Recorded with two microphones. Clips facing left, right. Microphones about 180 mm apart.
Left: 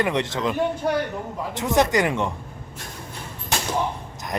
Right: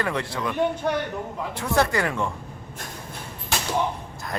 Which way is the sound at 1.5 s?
20° left (ahead or behind).